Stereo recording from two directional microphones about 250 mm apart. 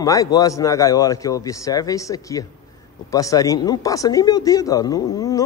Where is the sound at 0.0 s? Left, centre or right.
Centre.